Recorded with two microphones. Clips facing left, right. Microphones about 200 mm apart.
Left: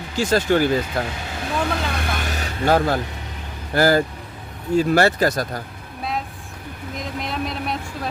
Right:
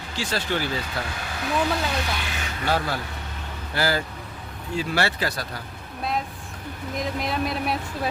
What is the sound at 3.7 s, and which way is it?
Speech, 50° left (ahead or behind).